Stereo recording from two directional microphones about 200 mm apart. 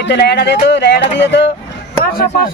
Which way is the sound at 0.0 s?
60° left (ahead or behind).